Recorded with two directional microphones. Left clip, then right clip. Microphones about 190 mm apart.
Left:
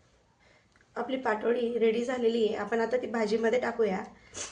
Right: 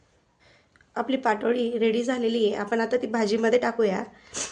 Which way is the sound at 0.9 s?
65° right (ahead or behind).